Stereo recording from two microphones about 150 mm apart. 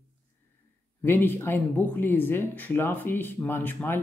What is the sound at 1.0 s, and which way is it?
Speech, 15° left (ahead or behind).